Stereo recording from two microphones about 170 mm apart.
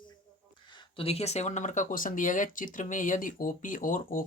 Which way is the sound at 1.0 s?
35° left (ahead or behind).